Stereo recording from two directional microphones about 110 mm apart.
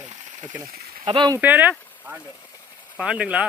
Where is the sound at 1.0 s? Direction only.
45° right (ahead or behind).